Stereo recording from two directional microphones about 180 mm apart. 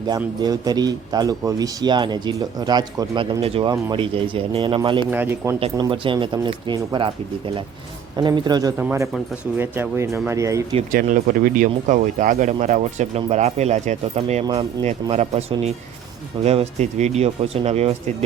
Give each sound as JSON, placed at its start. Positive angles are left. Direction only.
{"t": 0.3, "sound": "a man's voice", "side_deg": -20}
{"t": 5.1, "sound": "speech", "side_deg": -10}
{"t": 5.5, "sound": "a man's voice", "side_deg": -30}
{"t": 8.1, "sound": "a man's voice", "side_deg": -25}
{"t": 8.8, "sound": "speech", "side_deg": -10}
{"t": 10.9, "sound": "speech", "side_deg": -50}